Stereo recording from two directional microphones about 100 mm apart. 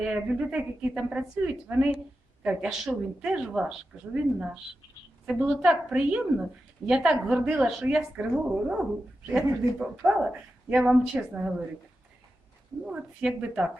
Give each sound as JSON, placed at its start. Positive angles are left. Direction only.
{"t": 0.0, "sound": "a woman's voice", "side_deg": -10}
{"t": 12.8, "sound": "speech", "side_deg": -5}